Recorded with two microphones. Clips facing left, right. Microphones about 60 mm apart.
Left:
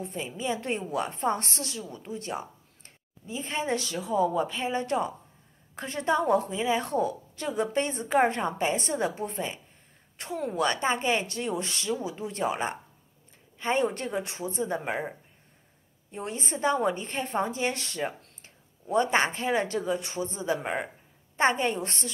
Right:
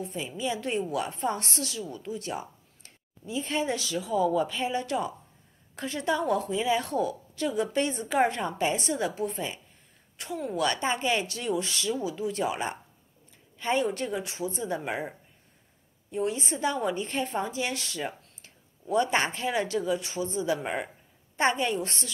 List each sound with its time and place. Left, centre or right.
0.0 s a woman's voice: left
16.1 s a woman's voice: left
20.6 s speech: centre
21.4 s a woman's voice: left